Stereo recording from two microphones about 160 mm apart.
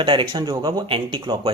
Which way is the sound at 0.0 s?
30° right (ahead or behind).